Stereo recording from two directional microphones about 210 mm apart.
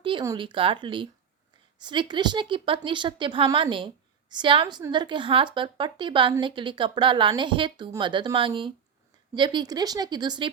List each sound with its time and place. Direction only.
0.0 s a woman's voice: 20° right (ahead or behind)